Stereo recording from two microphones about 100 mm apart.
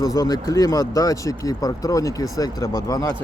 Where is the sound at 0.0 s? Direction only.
35° left (ahead or behind).